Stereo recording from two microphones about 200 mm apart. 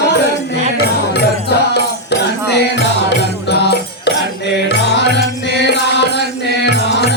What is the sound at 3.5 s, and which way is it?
Music, 55° left (ahead or behind).